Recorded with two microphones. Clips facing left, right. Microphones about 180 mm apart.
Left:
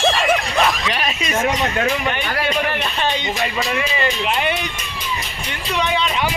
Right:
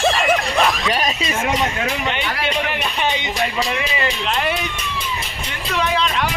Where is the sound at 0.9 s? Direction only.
35° right (ahead or behind).